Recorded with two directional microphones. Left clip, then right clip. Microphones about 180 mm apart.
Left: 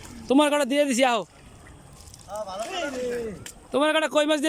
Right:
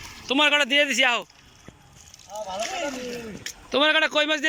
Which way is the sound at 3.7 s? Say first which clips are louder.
Right 2 dB; 10° left (ahead or behind).